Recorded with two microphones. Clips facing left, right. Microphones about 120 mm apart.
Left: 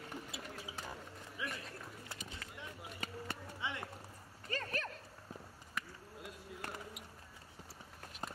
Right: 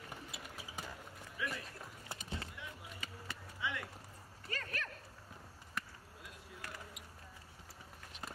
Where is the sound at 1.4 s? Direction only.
20° left (ahead or behind).